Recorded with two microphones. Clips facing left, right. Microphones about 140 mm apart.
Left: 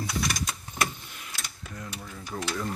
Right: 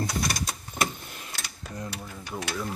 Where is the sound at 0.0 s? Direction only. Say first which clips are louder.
Right 1 dB; 35° right (ahead or behind).